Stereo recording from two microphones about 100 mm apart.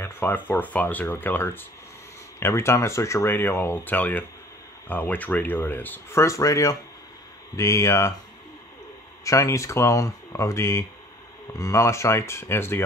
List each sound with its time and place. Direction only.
0.0 s speech: 20° left (ahead or behind)
6.2 s speech: 30° left (ahead or behind)
9.2 s speech: 30° left (ahead or behind)